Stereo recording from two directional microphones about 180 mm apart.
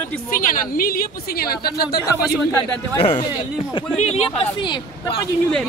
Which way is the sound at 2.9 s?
30° left (ahead or behind).